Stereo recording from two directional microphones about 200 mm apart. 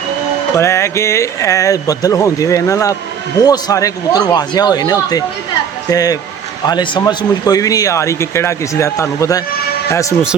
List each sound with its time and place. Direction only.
0.5 s a man's voice: 15° left (ahead or behind)